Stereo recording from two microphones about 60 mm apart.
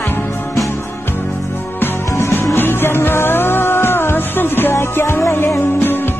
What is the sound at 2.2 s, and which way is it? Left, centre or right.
Music, left.